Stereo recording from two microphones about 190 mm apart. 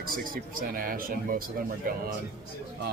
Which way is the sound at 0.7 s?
50° right (ahead or behind).